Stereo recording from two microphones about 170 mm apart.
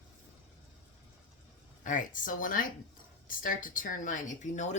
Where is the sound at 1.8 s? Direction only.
50° left (ahead or behind).